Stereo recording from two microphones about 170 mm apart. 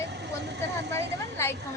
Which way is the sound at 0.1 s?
85° right.